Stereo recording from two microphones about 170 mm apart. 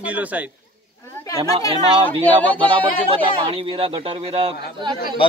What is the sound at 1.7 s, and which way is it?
Speech, 30° right (ahead or behind).